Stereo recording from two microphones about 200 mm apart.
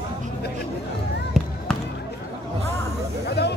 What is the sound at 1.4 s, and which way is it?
Basketball bounce, centre (ahead or behind).